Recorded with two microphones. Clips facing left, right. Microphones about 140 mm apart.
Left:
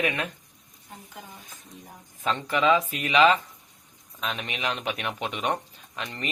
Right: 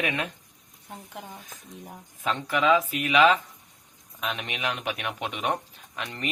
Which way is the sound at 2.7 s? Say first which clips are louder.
Even; 5° right (ahead or behind).